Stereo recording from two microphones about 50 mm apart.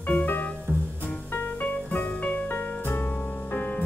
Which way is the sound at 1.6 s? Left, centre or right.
Left.